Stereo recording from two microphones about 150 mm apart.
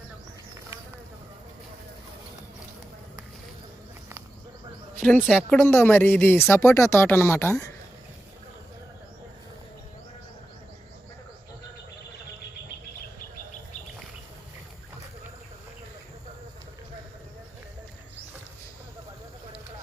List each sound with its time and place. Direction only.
5.2 s speech: centre (ahead or behind)
5.5 s speech: 15° left (ahead or behind)